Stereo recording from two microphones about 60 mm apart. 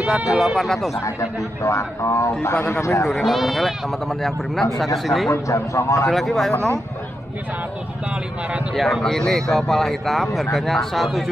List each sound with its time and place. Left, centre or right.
0.1 s speech: centre
1.6 s speech: left
2.5 s a man's voice: left
2.8 s speech: left
3.1 s speech: centre
5.3 s speech: left
6.0 s speech: centre
8.7 s speech: centre